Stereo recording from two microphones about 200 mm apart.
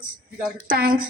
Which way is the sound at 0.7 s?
45° right (ahead or behind).